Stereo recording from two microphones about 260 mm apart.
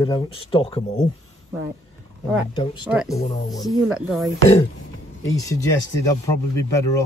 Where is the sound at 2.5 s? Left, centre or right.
Centre.